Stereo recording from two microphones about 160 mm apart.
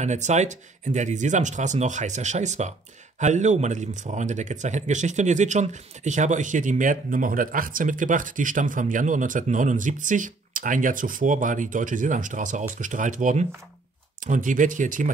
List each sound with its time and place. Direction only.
0.0 s speech: 45° right (ahead or behind)